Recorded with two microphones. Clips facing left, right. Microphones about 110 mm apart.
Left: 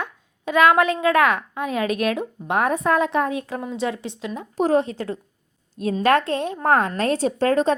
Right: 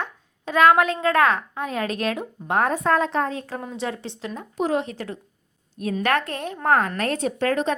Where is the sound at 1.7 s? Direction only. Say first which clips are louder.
Left 4 dB; 30° right (ahead or behind).